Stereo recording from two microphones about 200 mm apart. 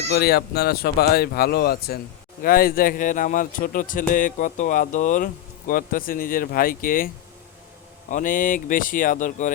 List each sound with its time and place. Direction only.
0.1 s speech: 55° left (ahead or behind)
8.1 s speech: 40° left (ahead or behind)